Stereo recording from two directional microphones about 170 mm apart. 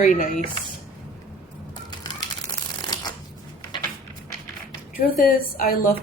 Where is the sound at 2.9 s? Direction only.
25° left (ahead or behind).